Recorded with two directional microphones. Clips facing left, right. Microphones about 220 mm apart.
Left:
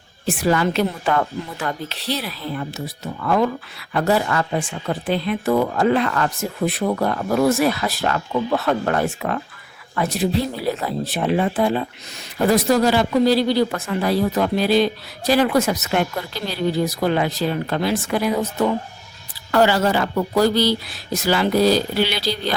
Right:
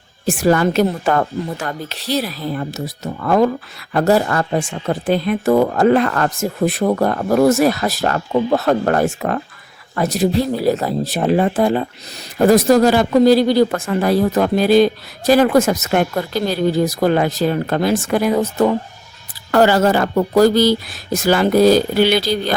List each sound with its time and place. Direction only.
0.3 s speech: 45° right (ahead or behind)